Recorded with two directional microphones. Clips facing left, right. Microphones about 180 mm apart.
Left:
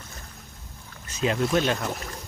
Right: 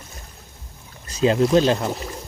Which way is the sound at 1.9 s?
15° right (ahead or behind).